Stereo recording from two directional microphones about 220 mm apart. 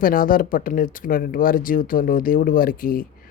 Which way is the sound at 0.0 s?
40° left (ahead or behind).